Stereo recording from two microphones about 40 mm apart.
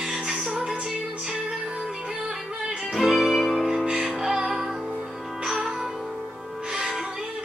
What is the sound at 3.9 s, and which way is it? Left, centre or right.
Music, centre.